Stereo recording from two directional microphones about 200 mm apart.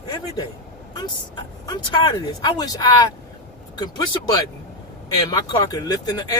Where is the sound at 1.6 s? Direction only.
20° left (ahead or behind).